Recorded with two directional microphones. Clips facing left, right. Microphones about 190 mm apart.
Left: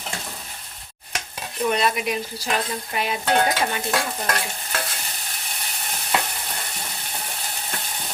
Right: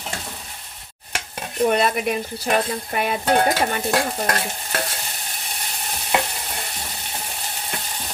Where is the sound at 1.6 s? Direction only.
50° right (ahead or behind).